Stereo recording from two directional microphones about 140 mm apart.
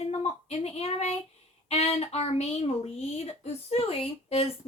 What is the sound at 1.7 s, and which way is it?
A woman's voice, 45° left (ahead or behind).